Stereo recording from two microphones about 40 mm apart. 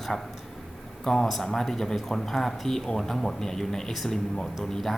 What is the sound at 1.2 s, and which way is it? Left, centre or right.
Speech, centre.